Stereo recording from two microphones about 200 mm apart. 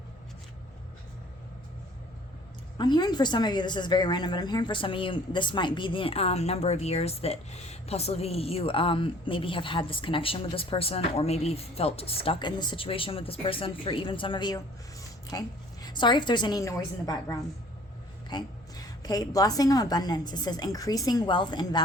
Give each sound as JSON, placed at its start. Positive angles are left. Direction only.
{"t": 2.7, "sound": "a woman's voice", "side_deg": 20}